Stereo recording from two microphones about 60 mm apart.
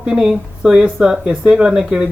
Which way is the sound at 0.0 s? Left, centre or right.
Centre.